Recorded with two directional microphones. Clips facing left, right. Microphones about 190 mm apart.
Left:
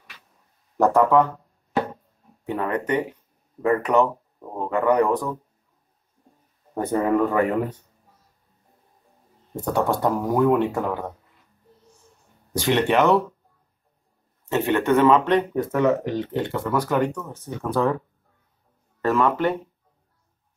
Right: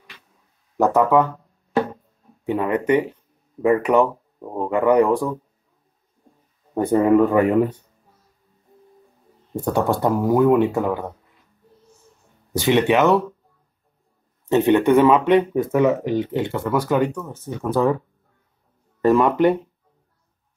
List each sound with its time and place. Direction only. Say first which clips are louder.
0.7 s speech: right 1 dB; 5° right (ahead or behind)
2.4 s speech: right 5 dB; 10° right (ahead or behind)
6.7 s a sound: right 5 dB; 10° right (ahead or behind)
7.0 s speech: right 5 dB; 20° right (ahead or behind)
9.8 s speech: right 3 dB; 5° right (ahead or behind)
12.5 s speech: right 3 dB; 5° right (ahead or behind)
14.5 s speech: right 5 dB; 15° right (ahead or behind)
18.9 s speech: right 5 dB; 15° right (ahead or behind)